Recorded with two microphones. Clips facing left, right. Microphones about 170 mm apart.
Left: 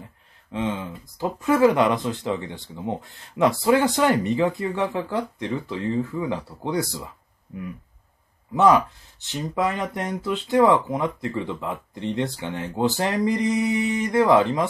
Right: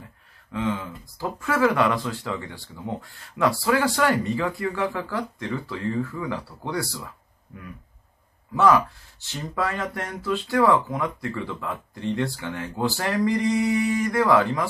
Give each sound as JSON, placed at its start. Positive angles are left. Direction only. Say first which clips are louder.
{"t": 0.5, "sound": "speech", "louder": "even", "side_deg": 20}